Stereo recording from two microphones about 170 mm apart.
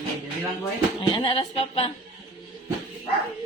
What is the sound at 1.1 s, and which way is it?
Speech, 30° left (ahead or behind).